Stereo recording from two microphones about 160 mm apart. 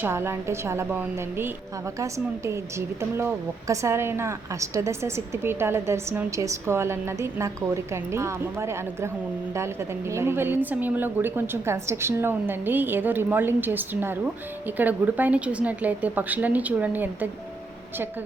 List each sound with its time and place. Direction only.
0.0 s a woman's voice: 15° right (ahead or behind)
10.1 s a woman's voice: 15° right (ahead or behind)